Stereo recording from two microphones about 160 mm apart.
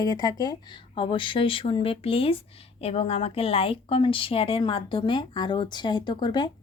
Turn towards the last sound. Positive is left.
turn(degrees=30)  # may be behind; listen again after turning